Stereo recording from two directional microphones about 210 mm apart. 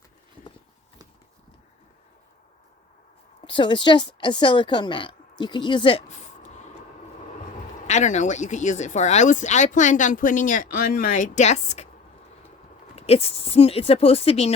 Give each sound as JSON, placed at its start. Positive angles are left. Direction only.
{"t": 3.4, "sound": "a woman's voice", "side_deg": 20}
{"t": 7.9, "sound": "speech", "side_deg": 35}
{"t": 13.0, "sound": "speech", "side_deg": 30}